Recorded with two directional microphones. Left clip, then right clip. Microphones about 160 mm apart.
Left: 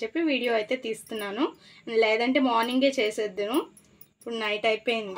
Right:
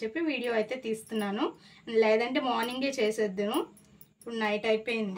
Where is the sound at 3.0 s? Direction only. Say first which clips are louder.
Left 2 dB; 50° left (ahead or behind).